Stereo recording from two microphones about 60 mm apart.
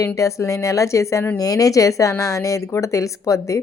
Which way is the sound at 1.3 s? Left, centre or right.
Left.